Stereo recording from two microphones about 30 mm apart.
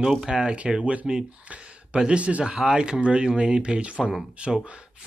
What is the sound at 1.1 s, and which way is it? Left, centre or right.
Speech, right.